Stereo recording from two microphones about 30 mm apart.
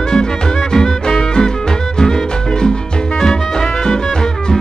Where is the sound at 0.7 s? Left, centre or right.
Centre; by 3.1 s left.